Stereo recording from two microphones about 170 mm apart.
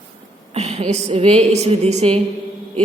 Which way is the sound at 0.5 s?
40° right (ahead or behind).